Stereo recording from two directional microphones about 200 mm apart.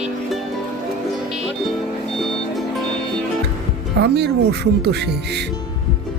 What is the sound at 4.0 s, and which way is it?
Speech, 55° right (ahead or behind).